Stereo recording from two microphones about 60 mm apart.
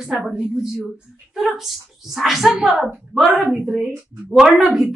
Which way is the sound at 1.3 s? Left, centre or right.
Centre.